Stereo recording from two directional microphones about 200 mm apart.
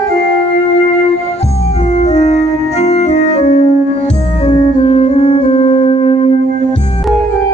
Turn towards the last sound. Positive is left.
turn(degrees=25)  # may be behind; listen again after turning